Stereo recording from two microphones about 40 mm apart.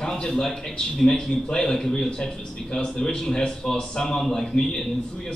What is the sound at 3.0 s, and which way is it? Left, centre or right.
A man's voice, centre.